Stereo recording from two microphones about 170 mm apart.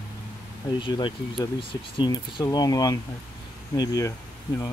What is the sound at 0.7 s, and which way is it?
Speech, 30° left (ahead or behind).